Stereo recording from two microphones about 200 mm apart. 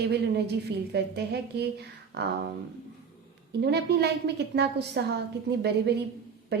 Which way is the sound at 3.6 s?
55° right (ahead or behind).